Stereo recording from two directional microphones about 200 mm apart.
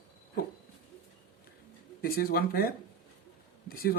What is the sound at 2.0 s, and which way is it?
Speech, 50° left (ahead or behind).